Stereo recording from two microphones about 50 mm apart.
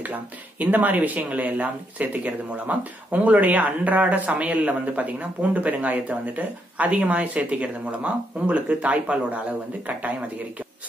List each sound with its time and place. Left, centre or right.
0.0 s speech: right